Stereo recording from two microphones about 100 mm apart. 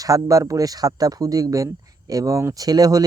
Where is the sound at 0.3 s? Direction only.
35° right (ahead or behind).